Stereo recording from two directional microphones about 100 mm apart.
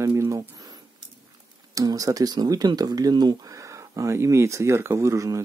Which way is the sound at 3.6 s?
30° right (ahead or behind).